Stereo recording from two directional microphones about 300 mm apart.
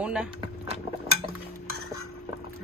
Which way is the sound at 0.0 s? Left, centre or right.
Centre.